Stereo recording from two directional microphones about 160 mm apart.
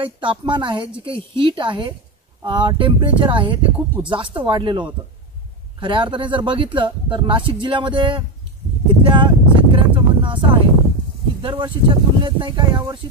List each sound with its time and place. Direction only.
0.0 s speech: 30° right (ahead or behind)
9.0 s a sound: 30° right (ahead or behind)
11.4 s speech: 30° right (ahead or behind)